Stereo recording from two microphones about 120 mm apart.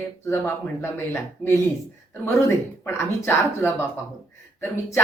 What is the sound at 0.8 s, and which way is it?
Speech, 20° left (ahead or behind).